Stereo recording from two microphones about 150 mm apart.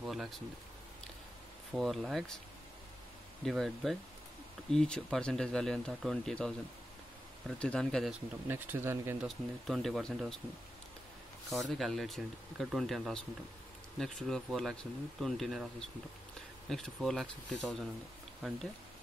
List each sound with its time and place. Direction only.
0.0 s speech: centre (ahead or behind)
1.7 s speech: centre (ahead or behind)
3.4 s speech: centre (ahead or behind)
8.5 s speech: 15° right (ahead or behind)
9.2 s speech: centre (ahead or behind)
11.8 s speech: centre (ahead or behind)